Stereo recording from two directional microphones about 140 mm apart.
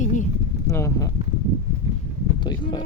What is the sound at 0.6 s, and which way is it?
Speech, 20° left (ahead or behind).